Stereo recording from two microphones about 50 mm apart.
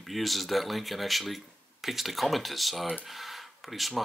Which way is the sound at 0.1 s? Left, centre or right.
Centre.